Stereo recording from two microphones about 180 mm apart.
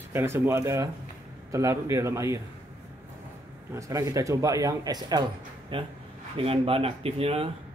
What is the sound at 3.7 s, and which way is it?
Speech, 20° right (ahead or behind).